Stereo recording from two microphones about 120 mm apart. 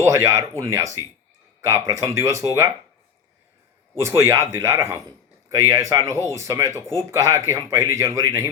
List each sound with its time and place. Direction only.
0.0 s speech: 25° right (ahead or behind)
3.9 s speech: 25° right (ahead or behind)